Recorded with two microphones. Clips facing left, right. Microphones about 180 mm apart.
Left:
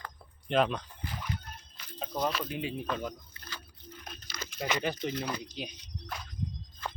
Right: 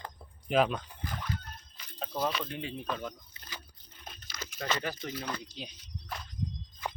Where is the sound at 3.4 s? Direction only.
20° right (ahead or behind).